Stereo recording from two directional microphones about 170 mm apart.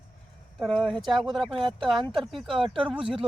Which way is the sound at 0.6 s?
5° left (ahead or behind).